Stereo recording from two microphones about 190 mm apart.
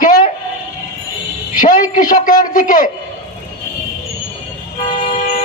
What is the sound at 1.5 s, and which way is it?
A man's voice, 45° left (ahead or behind).